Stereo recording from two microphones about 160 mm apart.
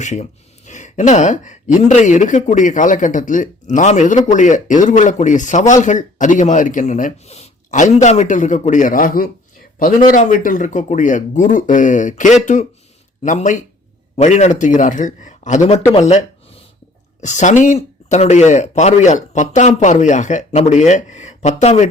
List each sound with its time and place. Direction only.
0.0 s speech: 45° left (ahead or behind)